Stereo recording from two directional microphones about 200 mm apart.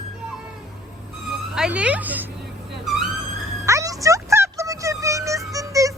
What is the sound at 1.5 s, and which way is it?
Speech, 5° right (ahead or behind).